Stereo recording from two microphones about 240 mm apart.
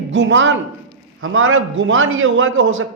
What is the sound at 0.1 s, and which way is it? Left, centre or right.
A man's voice, right.